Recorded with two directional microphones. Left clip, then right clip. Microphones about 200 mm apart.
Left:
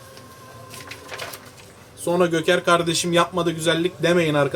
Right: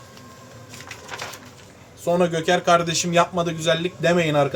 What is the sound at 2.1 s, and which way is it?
A man's voice, 20° left (ahead or behind).